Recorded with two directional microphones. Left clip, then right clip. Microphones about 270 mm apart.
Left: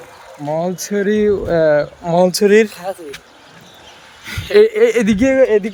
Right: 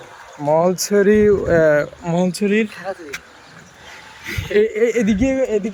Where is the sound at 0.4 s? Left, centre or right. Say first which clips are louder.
Right 4 dB; centre.